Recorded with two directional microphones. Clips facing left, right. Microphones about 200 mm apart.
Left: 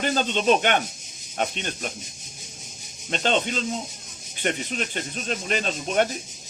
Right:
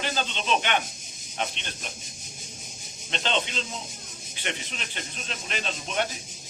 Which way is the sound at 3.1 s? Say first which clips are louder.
Left 5 dB; 45° left (ahead or behind).